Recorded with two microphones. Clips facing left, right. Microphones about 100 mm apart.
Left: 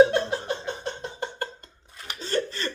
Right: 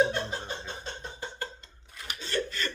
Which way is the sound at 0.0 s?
70° left (ahead or behind).